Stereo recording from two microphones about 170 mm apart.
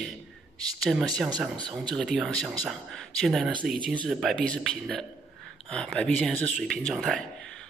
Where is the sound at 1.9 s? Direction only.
Centre (ahead or behind).